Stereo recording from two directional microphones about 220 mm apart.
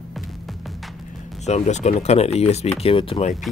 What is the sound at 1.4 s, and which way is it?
Speech, 30° left (ahead or behind).